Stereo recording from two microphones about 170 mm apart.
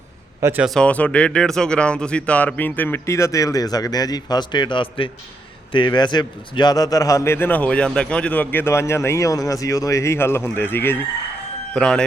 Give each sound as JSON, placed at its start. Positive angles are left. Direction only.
{"t": 0.4, "sound": "speech", "side_deg": -10}
{"t": 0.7, "sound": "a man's voice", "side_deg": 5}